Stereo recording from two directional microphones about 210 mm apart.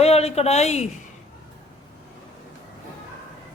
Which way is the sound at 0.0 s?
30° left (ahead or behind).